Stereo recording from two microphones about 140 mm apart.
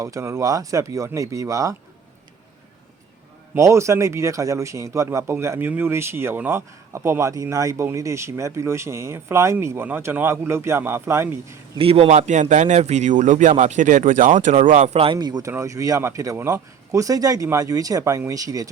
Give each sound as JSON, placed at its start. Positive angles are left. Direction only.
{"t": 0.0, "sound": "a man's voice", "side_deg": -20}
{"t": 3.5, "sound": "a man's voice", "side_deg": -20}
{"t": 11.8, "sound": "a man's voice", "side_deg": -45}
{"t": 14.9, "sound": "a man's voice", "side_deg": -35}